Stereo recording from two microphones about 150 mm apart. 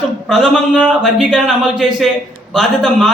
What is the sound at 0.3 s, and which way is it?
A man's voice, centre (ahead or behind).